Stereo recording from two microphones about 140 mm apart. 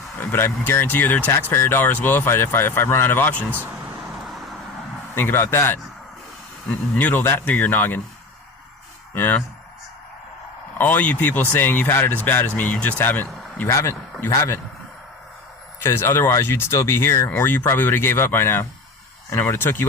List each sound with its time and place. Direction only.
0.2 s speech: 15° left (ahead or behind)
5.1 s speech: 15° left (ahead or behind)
9.1 s speech: 15° left (ahead or behind)
10.8 s speech: 15° left (ahead or behind)
15.8 s speech: 15° left (ahead or behind)